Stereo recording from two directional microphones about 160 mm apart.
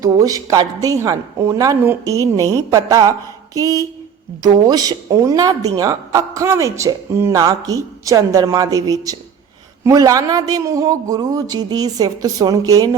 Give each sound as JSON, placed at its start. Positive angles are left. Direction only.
{"t": 0.0, "sound": "a woman's voice", "side_deg": -20}